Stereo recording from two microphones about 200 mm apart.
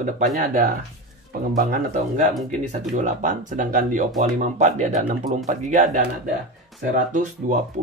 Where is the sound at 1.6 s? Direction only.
45° right (ahead or behind).